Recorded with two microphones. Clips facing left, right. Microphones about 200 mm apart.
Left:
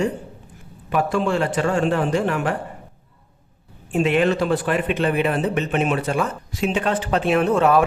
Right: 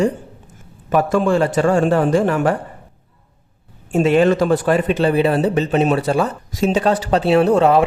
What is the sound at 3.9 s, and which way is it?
A man's voice, 40° right (ahead or behind).